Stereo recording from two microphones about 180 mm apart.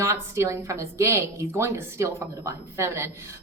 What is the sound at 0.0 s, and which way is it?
A woman's voice, 15° right (ahead or behind).